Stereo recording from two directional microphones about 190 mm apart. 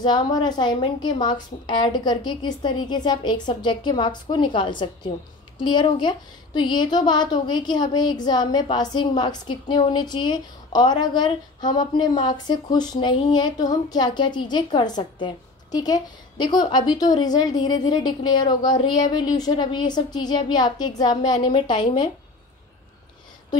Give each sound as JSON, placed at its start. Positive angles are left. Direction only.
{"t": 0.0, "sound": "speech", "side_deg": 20}